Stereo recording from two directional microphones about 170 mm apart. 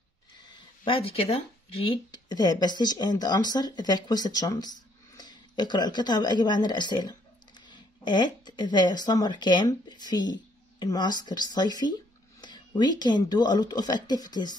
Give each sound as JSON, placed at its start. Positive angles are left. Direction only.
{"t": 0.8, "sound": "speech", "side_deg": 30}